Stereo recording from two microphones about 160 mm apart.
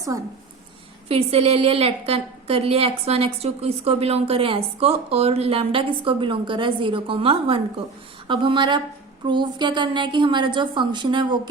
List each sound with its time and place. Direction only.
0.1 s a woman's voice: 20° right (ahead or behind)
1.0 s a woman's voice: 40° right (ahead or behind)